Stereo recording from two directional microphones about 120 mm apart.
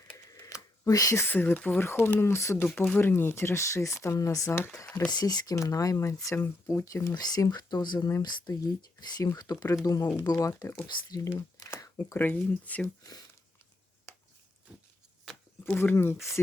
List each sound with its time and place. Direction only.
0.3 s speech: 25° left (ahead or behind)
5.1 s speech: 35° left (ahead or behind)
12.1 s speech: 15° left (ahead or behind)
15.3 s a sound: centre (ahead or behind)
15.6 s speech: 15° left (ahead or behind)